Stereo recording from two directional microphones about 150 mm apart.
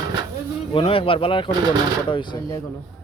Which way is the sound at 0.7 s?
35° left (ahead or behind).